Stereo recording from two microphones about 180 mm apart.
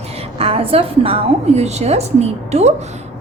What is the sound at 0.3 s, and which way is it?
A woman's voice, 35° right (ahead or behind).